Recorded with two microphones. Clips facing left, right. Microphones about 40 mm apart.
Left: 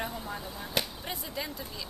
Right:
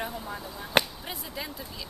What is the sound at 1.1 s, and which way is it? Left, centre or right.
Speech, centre.